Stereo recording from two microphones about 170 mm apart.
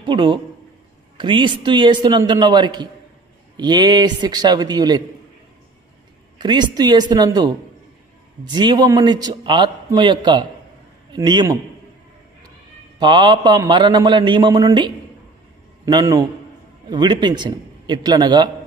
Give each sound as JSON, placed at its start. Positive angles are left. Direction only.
{"t": 0.0, "sound": "a man's voice", "side_deg": -30}
{"t": 6.3, "sound": "a man's voice", "side_deg": -25}
{"t": 13.0, "sound": "a man's voice", "side_deg": -25}